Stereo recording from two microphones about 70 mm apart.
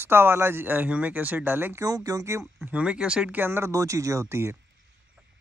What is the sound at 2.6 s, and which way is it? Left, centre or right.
Speech, centre.